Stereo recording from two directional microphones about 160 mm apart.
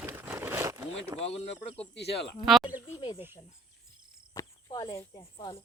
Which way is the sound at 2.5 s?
Centre (ahead or behind).